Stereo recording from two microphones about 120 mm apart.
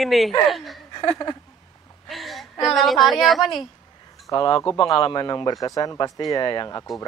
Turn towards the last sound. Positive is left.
turn(degrees=35)  # may be behind; listen again after turning